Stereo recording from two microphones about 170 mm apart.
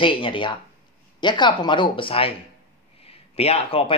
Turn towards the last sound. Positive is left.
turn(degrees=35)  # may be behind; listen again after turning